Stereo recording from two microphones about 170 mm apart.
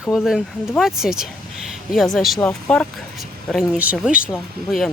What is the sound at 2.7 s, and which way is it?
A woman's voice, centre (ahead or behind).